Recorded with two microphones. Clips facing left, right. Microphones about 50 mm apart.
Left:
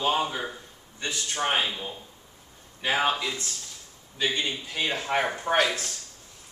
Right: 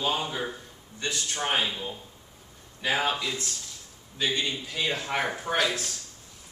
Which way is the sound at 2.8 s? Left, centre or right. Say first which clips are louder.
Left 2 dB; left.